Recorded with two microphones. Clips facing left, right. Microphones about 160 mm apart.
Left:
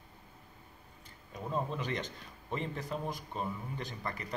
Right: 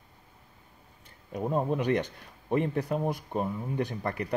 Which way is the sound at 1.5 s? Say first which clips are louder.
Right 8 dB; 60° right (ahead or behind).